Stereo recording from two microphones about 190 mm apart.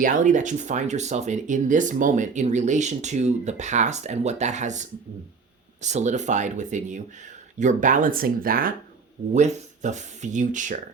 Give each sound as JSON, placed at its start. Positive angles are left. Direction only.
{"t": 0.0, "sound": "speech", "side_deg": -40}
{"t": 9.3, "sound": "speech", "side_deg": -35}